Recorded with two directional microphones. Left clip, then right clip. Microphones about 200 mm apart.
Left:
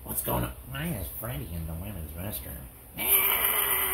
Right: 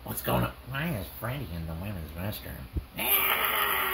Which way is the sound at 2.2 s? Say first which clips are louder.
Right 2 dB; 40° right (ahead or behind).